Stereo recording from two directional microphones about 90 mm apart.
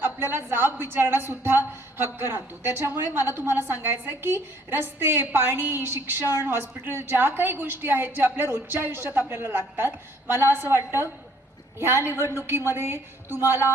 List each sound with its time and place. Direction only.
0.0 s a woman's voice: 25° right (ahead or behind)
11.8 s a woman's voice: 25° right (ahead or behind)